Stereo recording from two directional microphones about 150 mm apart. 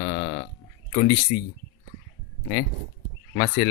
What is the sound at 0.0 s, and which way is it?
Burping, 65° left (ahead or behind).